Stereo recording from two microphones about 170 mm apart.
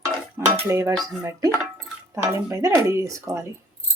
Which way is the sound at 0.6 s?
15° right (ahead or behind).